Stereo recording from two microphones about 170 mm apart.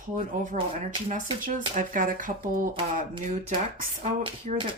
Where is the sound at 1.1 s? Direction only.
50° right (ahead or behind).